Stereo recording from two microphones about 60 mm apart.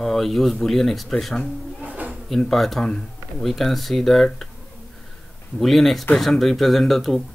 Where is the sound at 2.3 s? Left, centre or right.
Centre.